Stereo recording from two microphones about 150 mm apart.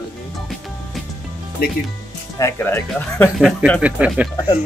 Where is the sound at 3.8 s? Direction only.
10° right (ahead or behind).